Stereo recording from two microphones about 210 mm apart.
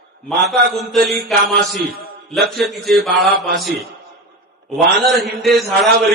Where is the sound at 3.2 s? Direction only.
45° right (ahead or behind).